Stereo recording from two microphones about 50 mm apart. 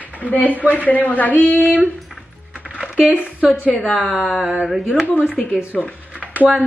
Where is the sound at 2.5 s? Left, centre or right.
Right.